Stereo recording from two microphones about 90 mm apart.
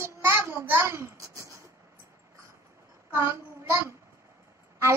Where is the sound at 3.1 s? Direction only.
30° right (ahead or behind).